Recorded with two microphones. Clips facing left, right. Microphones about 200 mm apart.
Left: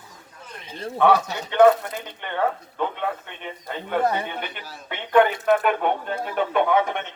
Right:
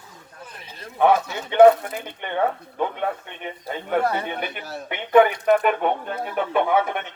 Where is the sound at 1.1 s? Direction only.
40° left (ahead or behind).